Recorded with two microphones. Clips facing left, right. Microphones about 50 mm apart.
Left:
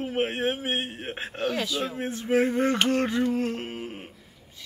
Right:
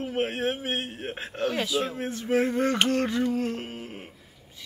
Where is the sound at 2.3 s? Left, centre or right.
Centre.